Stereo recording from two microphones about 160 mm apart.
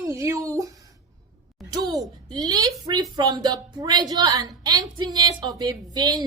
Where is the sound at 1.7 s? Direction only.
25° right (ahead or behind).